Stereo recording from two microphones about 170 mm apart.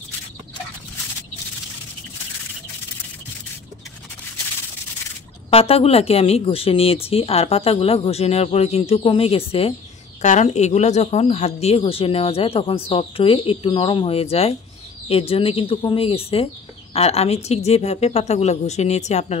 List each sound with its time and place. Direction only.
5.5 s speech: 35° left (ahead or behind)